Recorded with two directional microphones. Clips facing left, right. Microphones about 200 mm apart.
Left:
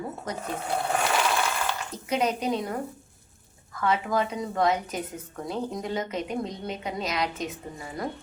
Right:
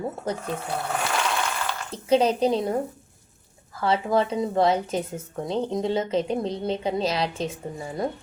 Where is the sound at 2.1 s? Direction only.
30° right (ahead or behind).